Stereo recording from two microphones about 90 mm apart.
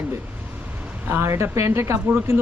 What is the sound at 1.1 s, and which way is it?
Speech, 30° right (ahead or behind).